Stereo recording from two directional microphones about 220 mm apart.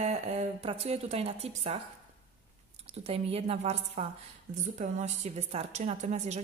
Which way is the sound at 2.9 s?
25° right (ahead or behind).